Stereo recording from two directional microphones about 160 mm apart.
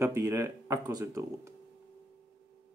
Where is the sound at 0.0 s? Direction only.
20° right (ahead or behind).